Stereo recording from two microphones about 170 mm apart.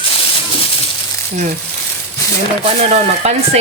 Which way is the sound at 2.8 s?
40° right (ahead or behind).